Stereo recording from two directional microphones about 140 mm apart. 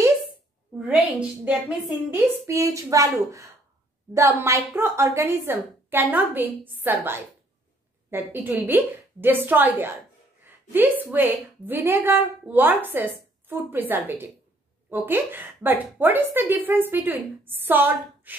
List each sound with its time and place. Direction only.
0.7 s a woman's voice: 10° right (ahead or behind)
2.0 s a woman's voice: 20° right (ahead or behind)